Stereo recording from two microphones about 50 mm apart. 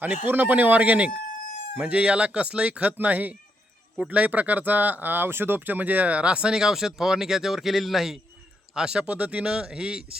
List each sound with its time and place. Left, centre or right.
0.0 s speech: right; by 8.2 s centre
8.7 s speech: centre